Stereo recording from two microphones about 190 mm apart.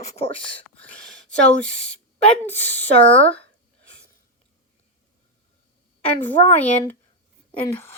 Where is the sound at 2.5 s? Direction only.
10° left (ahead or behind).